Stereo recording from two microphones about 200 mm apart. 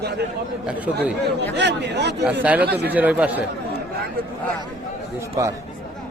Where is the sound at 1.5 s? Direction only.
60° right (ahead or behind).